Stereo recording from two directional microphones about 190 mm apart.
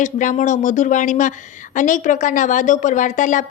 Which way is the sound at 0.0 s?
40° left (ahead or behind).